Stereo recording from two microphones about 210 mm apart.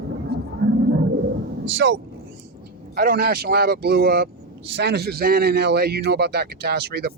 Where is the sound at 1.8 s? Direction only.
55° right (ahead or behind).